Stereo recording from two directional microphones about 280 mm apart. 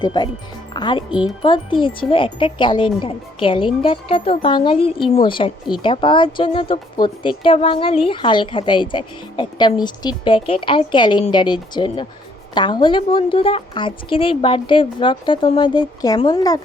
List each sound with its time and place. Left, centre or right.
0.0 s speech: centre